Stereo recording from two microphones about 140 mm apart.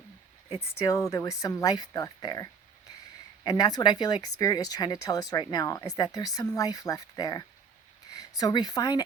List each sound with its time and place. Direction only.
0.5 s speech: 20° left (ahead or behind)